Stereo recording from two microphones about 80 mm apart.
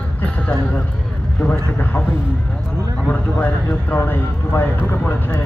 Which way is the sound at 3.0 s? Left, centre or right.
Left.